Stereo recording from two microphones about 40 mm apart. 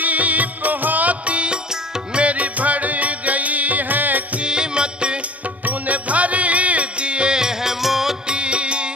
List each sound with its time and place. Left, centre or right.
0.0 s music: right
4.4 s music: right
5.7 s music: right; by 8.2 s centre
8.3 s music: right